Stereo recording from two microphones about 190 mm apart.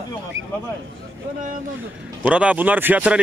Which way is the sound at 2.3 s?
5° right (ahead or behind).